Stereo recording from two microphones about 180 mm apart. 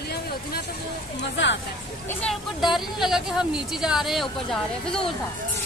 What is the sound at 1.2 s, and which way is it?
Speech, 90° left.